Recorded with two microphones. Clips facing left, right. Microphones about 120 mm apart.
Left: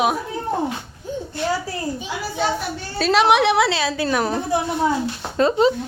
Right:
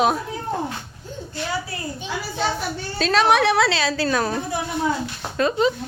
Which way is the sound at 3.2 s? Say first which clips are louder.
Left 1 dB; 20° left (ahead or behind).